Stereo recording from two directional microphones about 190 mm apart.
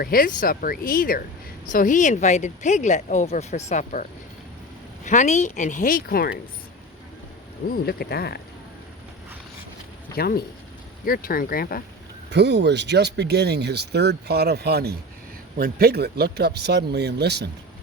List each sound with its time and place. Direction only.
0.0 s speech: 50° left (ahead or behind)
5.0 s speech: 40° left (ahead or behind)
7.9 s speech: 55° left (ahead or behind)
10.2 s speech: 55° left (ahead or behind)
12.3 s speech: 65° right (ahead or behind)